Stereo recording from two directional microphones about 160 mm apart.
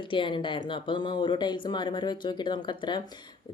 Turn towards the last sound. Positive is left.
turn(degrees=30)  # may be behind; listen again after turning